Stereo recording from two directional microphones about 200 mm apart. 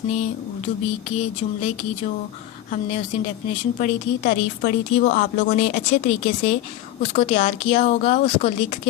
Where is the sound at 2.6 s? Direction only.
35° left (ahead or behind).